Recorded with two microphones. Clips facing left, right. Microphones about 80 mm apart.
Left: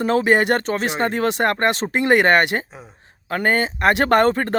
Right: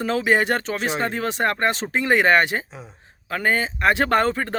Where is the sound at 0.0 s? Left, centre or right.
Left.